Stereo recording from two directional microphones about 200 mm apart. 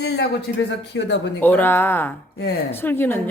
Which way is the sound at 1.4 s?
10° left (ahead or behind).